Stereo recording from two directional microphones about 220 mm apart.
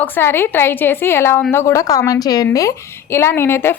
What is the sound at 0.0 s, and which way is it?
A woman's voice, 10° left (ahead or behind).